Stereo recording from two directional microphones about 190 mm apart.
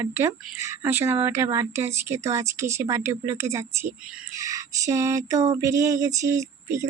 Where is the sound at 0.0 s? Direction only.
15° right (ahead or behind).